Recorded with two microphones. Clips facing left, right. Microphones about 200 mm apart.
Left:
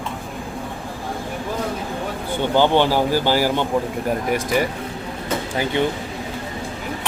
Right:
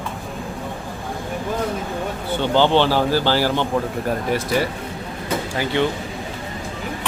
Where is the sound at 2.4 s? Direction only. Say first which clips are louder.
Even; 15° left (ahead or behind).